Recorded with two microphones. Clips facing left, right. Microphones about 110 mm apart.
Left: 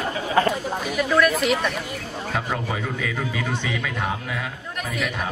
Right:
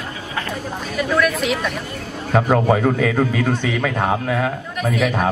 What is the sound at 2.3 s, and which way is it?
A man's voice, 60° right (ahead or behind).